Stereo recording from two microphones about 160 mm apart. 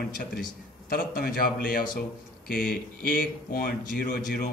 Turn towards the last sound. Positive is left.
turn(degrees=70)  # may be behind; listen again after turning